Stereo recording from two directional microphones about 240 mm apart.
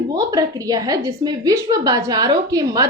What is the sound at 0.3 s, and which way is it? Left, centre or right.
A woman's voice, centre.